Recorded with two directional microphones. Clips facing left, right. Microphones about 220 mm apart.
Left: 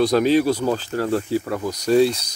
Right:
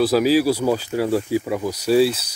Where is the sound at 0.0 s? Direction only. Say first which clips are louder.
Even; 5° right (ahead or behind).